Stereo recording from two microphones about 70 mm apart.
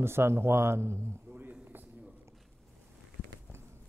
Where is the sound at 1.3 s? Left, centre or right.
Right.